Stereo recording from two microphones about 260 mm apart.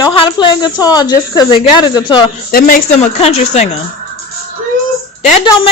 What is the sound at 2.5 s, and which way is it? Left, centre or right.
A man's voice, left.